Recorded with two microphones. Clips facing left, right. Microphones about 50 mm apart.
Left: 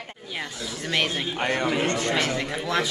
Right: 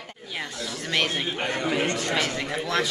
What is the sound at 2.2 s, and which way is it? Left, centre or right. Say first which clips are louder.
Speech: left 1 dB; centre.